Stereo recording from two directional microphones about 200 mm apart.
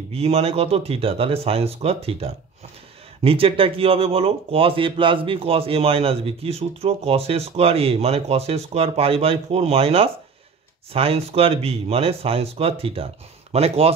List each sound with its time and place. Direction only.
0.1 s speech: 30° right (ahead or behind)